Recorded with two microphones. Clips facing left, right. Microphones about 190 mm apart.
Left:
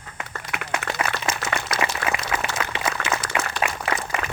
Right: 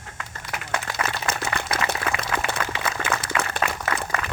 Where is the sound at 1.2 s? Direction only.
60° right (ahead or behind).